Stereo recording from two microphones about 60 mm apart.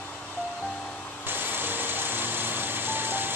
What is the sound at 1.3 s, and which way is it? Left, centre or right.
Vehicle, right.